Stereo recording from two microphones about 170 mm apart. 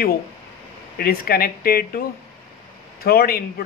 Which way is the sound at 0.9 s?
60° left (ahead or behind).